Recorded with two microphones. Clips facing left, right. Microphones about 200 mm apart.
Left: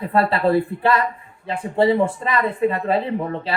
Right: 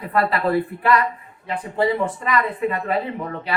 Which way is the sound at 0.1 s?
30° left (ahead or behind).